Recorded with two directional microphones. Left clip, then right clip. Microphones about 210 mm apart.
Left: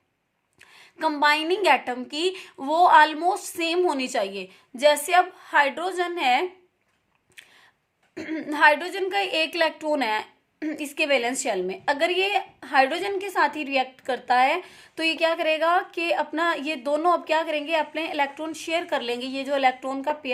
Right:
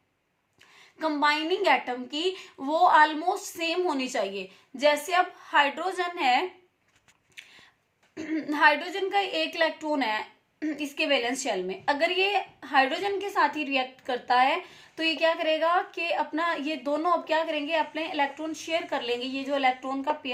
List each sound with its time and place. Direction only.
0.8 s a woman's voice: 40° left (ahead or behind)
8.1 s a woman's voice: 35° left (ahead or behind)